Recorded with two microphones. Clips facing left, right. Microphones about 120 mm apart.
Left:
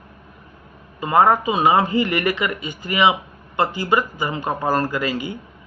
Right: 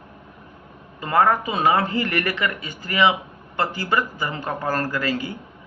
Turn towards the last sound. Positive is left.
turn(degrees=15)  # may be behind; listen again after turning